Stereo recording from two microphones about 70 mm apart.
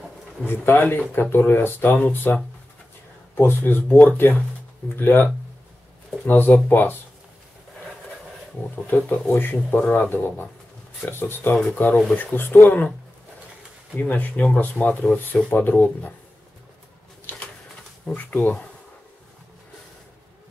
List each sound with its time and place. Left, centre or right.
0.5 s speech: left
8.8 s speech: left
11.5 s speech: centre
13.9 s speech: centre
17.3 s pigeon: left
18.0 s speech: left